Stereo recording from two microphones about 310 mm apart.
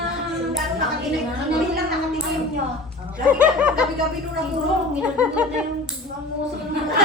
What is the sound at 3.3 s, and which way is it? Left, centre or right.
Child singing, centre.